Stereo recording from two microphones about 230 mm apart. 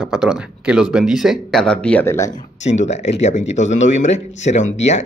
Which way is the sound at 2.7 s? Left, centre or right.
Left.